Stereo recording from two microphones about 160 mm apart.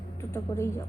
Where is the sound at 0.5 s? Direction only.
25° left (ahead or behind).